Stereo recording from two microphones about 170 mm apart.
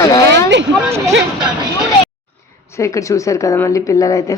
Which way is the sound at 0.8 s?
15° right (ahead or behind).